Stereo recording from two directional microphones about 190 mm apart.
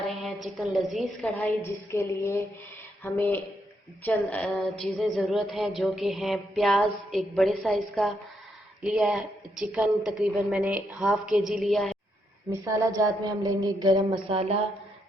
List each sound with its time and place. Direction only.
0.1 s a woman's voice: centre (ahead or behind)
1.9 s a sound: 10° left (ahead or behind)
4.0 s a woman's voice: 10° left (ahead or behind)
12.5 s a woman's voice: 15° right (ahead or behind)